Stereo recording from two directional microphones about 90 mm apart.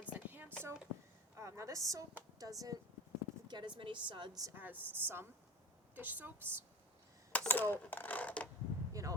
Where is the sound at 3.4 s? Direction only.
55° right (ahead or behind).